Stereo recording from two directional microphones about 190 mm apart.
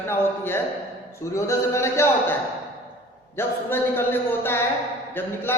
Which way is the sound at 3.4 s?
10° left (ahead or behind).